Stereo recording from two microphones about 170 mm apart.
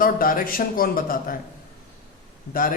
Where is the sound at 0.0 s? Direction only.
55° left (ahead or behind).